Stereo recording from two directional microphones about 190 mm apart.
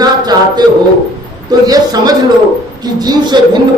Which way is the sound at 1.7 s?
20° right (ahead or behind).